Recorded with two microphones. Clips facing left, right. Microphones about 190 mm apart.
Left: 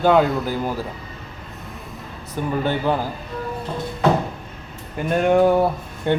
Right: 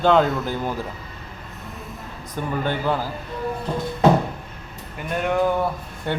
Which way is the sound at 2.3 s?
10° left (ahead or behind).